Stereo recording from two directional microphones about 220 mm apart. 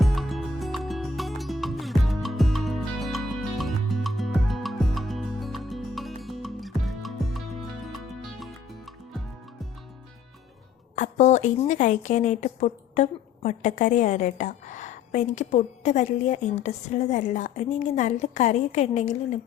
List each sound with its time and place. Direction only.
0.0 s music: centre (ahead or behind)
10.9 s a woman's voice: 35° left (ahead or behind)